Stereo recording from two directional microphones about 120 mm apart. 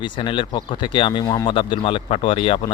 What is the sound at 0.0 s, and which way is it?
Speech, 40° left (ahead or behind).